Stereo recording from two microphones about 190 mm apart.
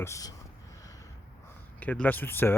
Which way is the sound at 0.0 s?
15° left (ahead or behind).